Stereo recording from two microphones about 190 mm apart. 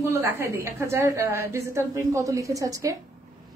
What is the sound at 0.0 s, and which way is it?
A woman's voice, 15° right (ahead or behind).